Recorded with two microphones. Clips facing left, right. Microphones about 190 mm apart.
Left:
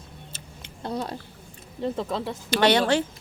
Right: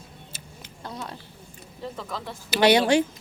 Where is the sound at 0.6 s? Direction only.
30° left (ahead or behind).